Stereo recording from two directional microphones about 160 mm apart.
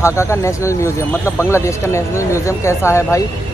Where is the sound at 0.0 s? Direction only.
15° left (ahead or behind).